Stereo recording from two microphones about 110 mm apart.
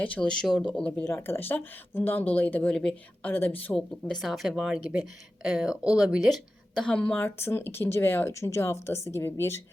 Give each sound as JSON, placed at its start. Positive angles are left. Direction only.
{"t": 0.0, "sound": "speech", "side_deg": 10}
{"t": 4.1, "sound": "a woman's voice", "side_deg": 0}
{"t": 7.3, "sound": "speech", "side_deg": 25}